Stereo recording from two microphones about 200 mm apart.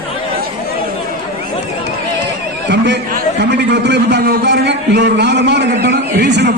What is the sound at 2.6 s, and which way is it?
A man's voice, 60° right (ahead or behind).